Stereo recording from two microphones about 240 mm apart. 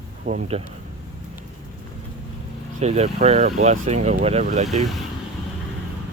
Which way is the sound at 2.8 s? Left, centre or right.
Right.